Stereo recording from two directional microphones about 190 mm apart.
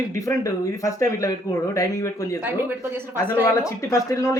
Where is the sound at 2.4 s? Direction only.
10° right (ahead or behind).